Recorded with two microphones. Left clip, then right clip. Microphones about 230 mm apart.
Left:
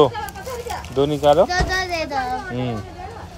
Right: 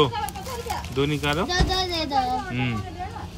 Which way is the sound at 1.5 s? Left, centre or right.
Right.